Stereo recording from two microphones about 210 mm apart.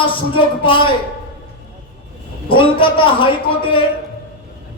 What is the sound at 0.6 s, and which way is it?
Speech, 25° left (ahead or behind).